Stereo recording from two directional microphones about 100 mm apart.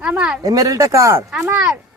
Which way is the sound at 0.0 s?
10° right (ahead or behind).